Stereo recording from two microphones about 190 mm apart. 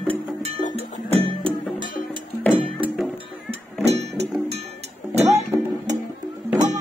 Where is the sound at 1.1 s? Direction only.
30° right (ahead or behind).